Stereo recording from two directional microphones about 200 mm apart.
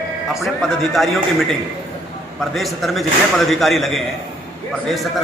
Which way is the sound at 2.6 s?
Centre (ahead or behind).